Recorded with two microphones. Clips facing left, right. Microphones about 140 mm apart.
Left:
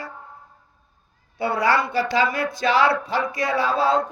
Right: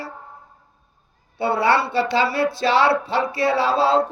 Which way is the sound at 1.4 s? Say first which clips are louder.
Right 2 dB; 25° right (ahead or behind).